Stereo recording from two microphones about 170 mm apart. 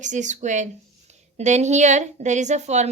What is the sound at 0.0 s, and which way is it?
Speech, 45° right (ahead or behind).